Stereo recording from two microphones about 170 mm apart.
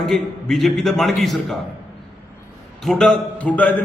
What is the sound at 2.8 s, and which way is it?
Speech, 5° left (ahead or behind).